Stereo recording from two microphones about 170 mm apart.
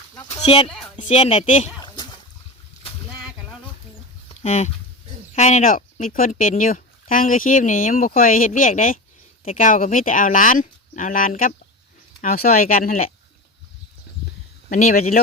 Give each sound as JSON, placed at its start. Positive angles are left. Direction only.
{"t": 0.4, "sound": "speech", "side_deg": 35}
{"t": 1.8, "sound": "a sound", "side_deg": 25}
{"t": 4.4, "sound": "speech", "side_deg": 45}
{"t": 14.7, "sound": "speech", "side_deg": 45}